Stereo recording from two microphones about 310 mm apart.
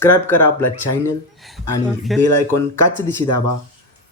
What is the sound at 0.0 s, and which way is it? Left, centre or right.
Speech, centre.